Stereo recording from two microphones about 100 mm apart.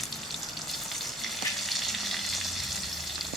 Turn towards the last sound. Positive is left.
turn(degrees=0)  # may be behind; listen again after turning